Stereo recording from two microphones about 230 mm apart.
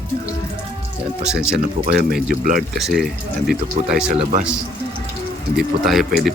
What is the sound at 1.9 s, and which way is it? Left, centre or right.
Speech, right.